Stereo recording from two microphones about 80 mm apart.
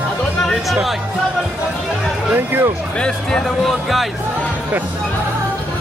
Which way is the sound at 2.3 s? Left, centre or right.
Right.